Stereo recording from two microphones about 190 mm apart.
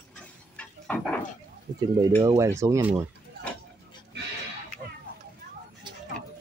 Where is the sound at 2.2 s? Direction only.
15° right (ahead or behind).